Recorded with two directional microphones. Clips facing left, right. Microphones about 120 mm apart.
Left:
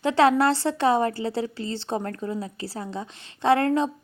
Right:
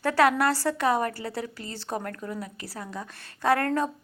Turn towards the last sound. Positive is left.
turn(degrees=20)  # may be behind; listen again after turning